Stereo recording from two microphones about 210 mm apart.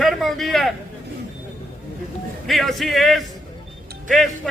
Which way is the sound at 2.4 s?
Centre (ahead or behind).